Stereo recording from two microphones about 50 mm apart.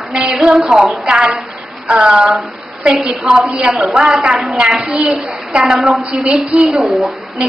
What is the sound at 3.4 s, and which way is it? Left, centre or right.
A woman's voice, right.